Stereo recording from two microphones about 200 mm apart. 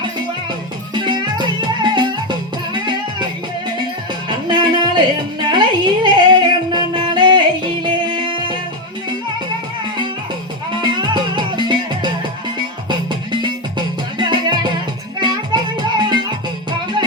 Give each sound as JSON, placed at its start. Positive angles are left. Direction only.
{"t": 0.9, "sound": "music", "side_deg": -25}
{"t": 4.3, "sound": "music", "side_deg": -20}
{"t": 10.8, "sound": "music", "side_deg": -20}